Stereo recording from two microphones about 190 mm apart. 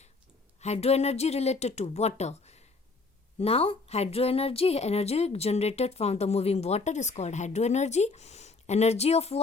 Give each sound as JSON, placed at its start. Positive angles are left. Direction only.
{"t": 0.6, "sound": "a woman's voice", "side_deg": 35}